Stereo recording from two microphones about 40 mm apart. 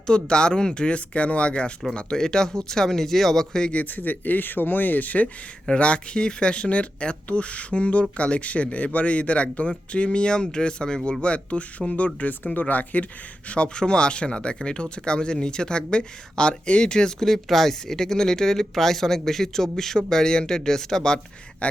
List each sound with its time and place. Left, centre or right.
0.1 s speech: left
3.9 s speech: left
5.8 s speech: left
13.5 s speech: left
17.2 s speech: centre
21.6 s speech: left